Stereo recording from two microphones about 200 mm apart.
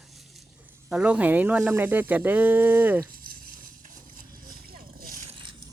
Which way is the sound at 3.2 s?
45° right (ahead or behind).